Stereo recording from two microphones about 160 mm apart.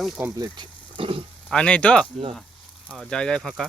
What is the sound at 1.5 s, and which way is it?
Speech, 5° left (ahead or behind).